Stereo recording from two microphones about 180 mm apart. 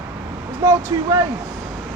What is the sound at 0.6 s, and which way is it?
Speech, 15° right (ahead or behind).